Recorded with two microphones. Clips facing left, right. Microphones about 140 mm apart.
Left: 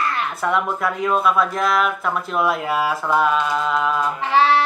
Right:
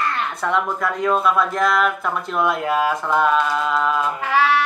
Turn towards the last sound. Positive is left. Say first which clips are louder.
# left 2 dB
turn(degrees=25)  # may be behind; listen again after turning